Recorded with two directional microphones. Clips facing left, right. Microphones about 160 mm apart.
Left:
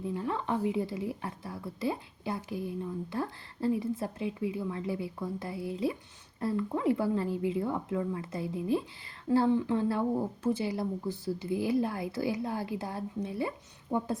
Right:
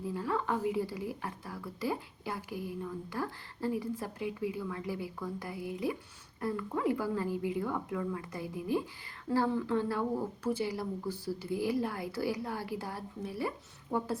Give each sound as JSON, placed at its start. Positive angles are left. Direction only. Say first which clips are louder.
{"t": 0.0, "sound": "speech", "louder": "left 1 dB", "side_deg": 25}